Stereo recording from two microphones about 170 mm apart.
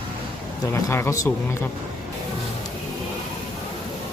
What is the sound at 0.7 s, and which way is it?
Speech, 15° left (ahead or behind).